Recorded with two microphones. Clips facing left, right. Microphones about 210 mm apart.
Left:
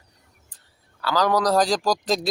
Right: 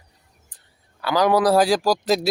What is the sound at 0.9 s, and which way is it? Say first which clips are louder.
Speech: right 3 dB; 15° right (ahead or behind).